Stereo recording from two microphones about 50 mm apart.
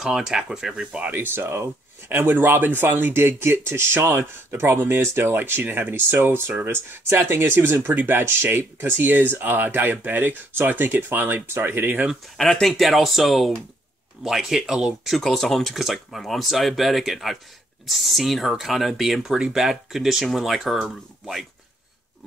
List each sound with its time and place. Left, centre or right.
0.0 s speech: centre
1.1 s speech: right
9.0 s speech: right
12.4 s speech: centre
15.2 s speech: centre